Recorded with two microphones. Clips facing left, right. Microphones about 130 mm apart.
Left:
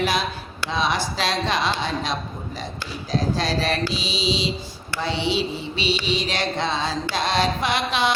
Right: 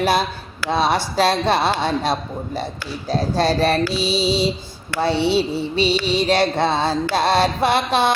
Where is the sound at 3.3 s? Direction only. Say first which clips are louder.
Right 6 dB; 55° right (ahead or behind).